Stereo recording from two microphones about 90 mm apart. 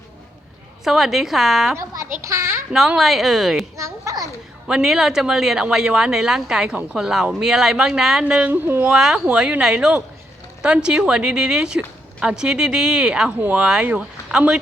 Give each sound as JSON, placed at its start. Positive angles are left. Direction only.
{"t": 0.9, "sound": "a woman's voice", "side_deg": -5}
{"t": 1.7, "sound": "a child's voice", "side_deg": -35}
{"t": 2.7, "sound": "a woman's voice", "side_deg": 0}
{"t": 3.8, "sound": "a child's voice", "side_deg": -35}
{"t": 4.7, "sound": "a woman's voice", "side_deg": -5}
{"t": 8.9, "sound": "a woman's voice", "side_deg": -5}